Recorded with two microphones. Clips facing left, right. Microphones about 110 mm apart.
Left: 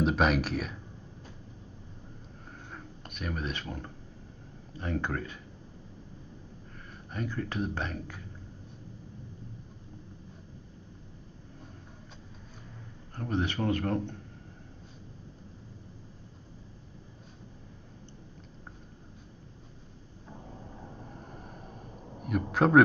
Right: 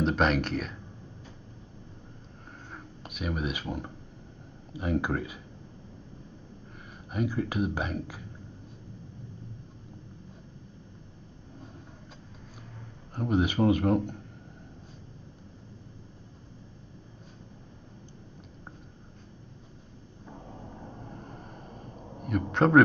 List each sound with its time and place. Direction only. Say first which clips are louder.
0.0 s speech: right 1 dB; 5° left (ahead or behind)
2.7 s a sound: right 2 dB; 5° right (ahead or behind)
4.7 s speech: right 4 dB; 10° right (ahead or behind)
7.1 s speech: right 5 dB; 10° right (ahead or behind)
13.1 s speech: right 5 dB; 15° right (ahead or behind)
21.1 s a sound: right 2 dB; centre (ahead or behind)